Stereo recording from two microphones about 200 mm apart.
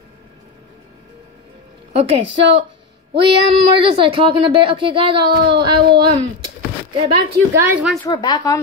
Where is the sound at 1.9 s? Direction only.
30° right (ahead or behind).